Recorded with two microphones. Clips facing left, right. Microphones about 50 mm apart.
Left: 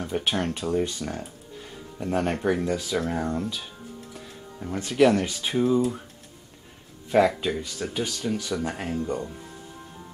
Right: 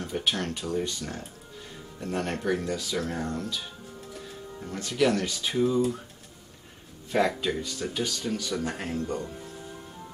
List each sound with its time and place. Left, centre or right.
0.2 s speech: left
4.6 s speech: left
7.1 s speech: centre